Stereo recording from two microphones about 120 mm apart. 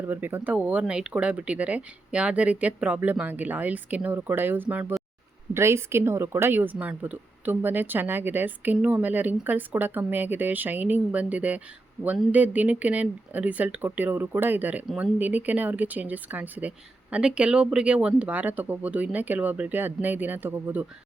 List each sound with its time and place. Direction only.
0.0 s speech: 15° right (ahead or behind)